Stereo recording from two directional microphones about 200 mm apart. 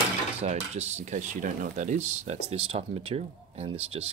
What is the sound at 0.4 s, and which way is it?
Speech, 35° right (ahead or behind).